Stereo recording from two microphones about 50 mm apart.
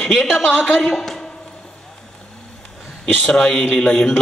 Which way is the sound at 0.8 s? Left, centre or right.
Centre.